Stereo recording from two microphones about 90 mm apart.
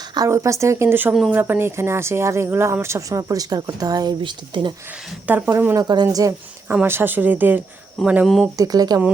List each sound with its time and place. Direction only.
0.3 s speech: 35° right (ahead or behind)
4.2 s speech: 65° right (ahead or behind)
5.3 s speech: 25° right (ahead or behind)
5.7 s speech: 45° right (ahead or behind)
6.8 s speech: 25° right (ahead or behind)
8.5 s speech: 45° right (ahead or behind)